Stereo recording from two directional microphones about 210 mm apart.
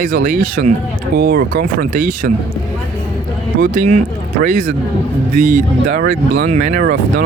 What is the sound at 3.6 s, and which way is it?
Speech, 35° right (ahead or behind).